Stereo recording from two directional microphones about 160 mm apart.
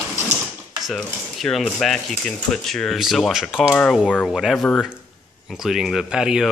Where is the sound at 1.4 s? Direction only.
5° left (ahead or behind).